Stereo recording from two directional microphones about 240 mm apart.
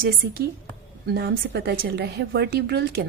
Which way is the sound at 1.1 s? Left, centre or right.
Right.